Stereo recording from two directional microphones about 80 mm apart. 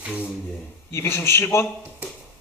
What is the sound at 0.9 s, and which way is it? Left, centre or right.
Speech, left.